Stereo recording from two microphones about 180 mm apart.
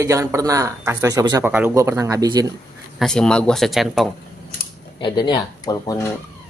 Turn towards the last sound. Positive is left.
turn(degrees=20)  # may be behind; listen again after turning